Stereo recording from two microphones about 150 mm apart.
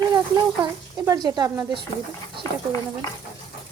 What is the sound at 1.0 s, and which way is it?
Speech, 25° right (ahead or behind).